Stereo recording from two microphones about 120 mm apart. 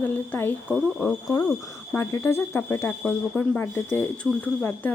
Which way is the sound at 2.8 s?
10° left (ahead or behind).